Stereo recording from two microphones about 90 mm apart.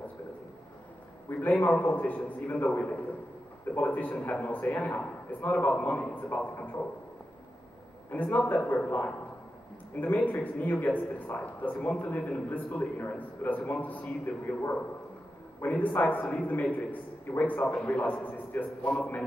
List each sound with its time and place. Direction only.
1.4 s a man's voice: 15° left (ahead or behind)
8.1 s a man's voice: 20° left (ahead or behind)